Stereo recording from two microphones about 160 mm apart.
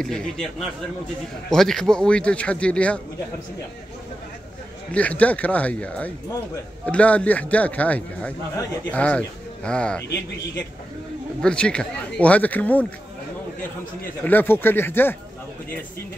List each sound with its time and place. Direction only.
0.0 s a man's voice: 5° left (ahead or behind)
1.5 s speech: 5° left (ahead or behind)
4.9 s speech: 10° left (ahead or behind)
11.4 s speech: 5° left (ahead or behind)
14.2 s speech: 10° left (ahead or behind)